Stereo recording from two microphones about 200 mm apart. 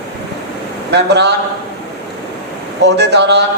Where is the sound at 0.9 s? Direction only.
60° right (ahead or behind).